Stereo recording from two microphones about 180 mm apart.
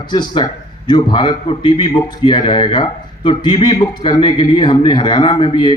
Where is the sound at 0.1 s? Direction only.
25° left (ahead or behind).